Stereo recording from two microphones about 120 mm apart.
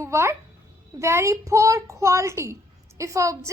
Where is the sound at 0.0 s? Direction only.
25° right (ahead or behind).